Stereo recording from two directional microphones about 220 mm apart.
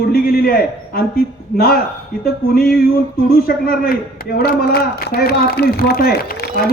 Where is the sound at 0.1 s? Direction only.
45° left (ahead or behind).